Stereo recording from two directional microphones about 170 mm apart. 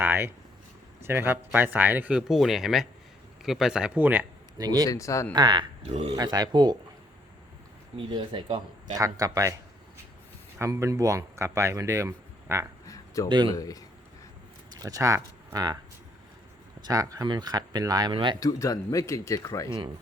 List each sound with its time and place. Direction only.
0.0 s a sound: 10° right (ahead or behind)
1.0 s speech: 15° right (ahead or behind)
4.5 s speech: 20° right (ahead or behind)
4.9 s speech: 20° left (ahead or behind)
5.3 s speech: 25° right (ahead or behind)
6.1 s speech: 25° right (ahead or behind)
7.9 s speech: 30° right (ahead or behind)
10.6 s speech: 15° right (ahead or behind)
12.8 s a sound: 20° left (ahead or behind)
13.2 s speech: 30° right (ahead or behind)
13.5 s speech: 20° left (ahead or behind)
14.7 s speech: 20° right (ahead or behind)
16.8 s speech: 20° right (ahead or behind)
18.3 s speech: 20° left (ahead or behind)